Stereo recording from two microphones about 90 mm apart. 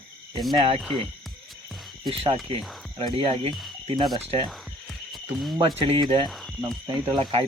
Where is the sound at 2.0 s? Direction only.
90° right.